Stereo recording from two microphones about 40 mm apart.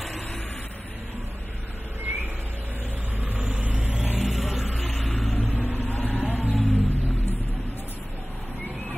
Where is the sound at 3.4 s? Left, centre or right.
Right.